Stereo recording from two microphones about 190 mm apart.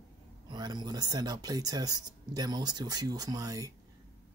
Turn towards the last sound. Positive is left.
turn(degrees=-20)  # may be behind; listen again after turning